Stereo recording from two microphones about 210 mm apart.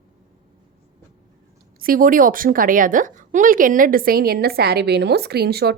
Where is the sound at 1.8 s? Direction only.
40° right (ahead or behind).